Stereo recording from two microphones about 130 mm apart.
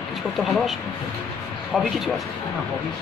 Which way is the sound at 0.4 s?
Centre (ahead or behind).